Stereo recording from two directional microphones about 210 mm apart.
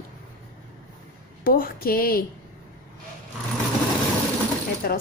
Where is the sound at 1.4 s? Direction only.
45° left (ahead or behind).